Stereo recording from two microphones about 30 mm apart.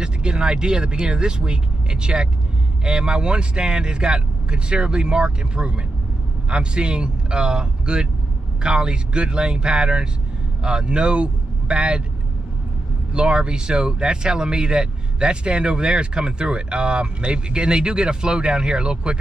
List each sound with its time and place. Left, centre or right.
0.0 s speech: right
13.1 s speech: right